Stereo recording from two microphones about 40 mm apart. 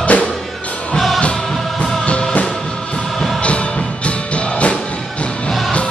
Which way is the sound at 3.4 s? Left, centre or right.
Left.